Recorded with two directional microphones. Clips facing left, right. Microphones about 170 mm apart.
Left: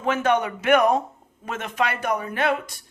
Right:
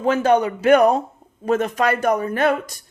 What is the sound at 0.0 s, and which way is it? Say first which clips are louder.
Speech: right 5 dB; 35° right (ahead or behind).